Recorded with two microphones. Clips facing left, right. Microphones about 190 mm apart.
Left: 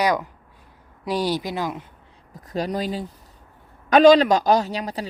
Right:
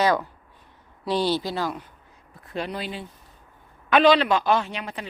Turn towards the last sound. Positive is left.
turn(degrees=35)  # may be behind; listen again after turning